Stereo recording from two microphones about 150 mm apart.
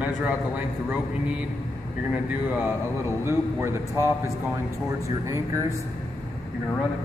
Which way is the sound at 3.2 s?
15° right (ahead or behind).